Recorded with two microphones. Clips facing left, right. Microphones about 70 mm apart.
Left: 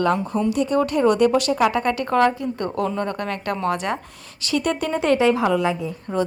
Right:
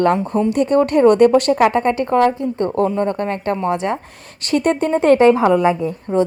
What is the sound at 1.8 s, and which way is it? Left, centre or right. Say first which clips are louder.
A woman's voice: right 4 dB; right.